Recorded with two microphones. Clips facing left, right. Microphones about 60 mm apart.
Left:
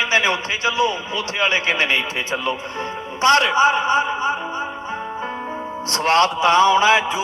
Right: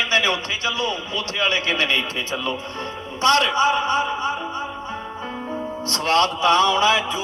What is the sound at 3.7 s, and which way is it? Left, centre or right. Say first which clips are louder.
Music: left 2 dB; centre.